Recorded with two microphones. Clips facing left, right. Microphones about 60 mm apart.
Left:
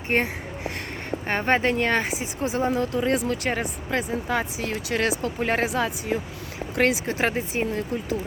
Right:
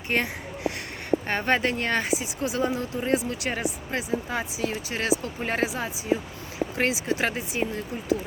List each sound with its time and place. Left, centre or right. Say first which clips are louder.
0.1 s speech: left 3 dB; left
1.3 s speech: left 6 dB; left
2.8 s speech: left 2 dB; left